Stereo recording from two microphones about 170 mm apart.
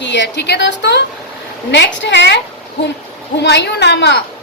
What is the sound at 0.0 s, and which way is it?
A woman's voice, 90° left.